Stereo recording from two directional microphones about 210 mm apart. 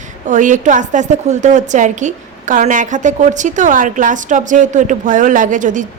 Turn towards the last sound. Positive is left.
turn(degrees=-35)  # may be behind; listen again after turning